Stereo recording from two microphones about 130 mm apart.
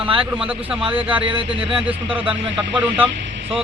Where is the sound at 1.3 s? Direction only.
40° right (ahead or behind).